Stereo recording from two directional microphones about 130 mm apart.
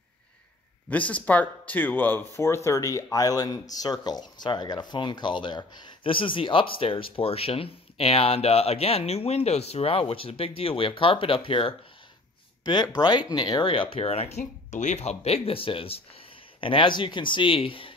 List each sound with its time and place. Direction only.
0.8 s speech: 10° left (ahead or behind); by 11.7 s 45° left (ahead or behind)
12.9 s speech: 35° left (ahead or behind); by 14.4 s 55° left (ahead or behind)
14.4 s speech: 70° left (ahead or behind); by 17.9 s 45° left (ahead or behind)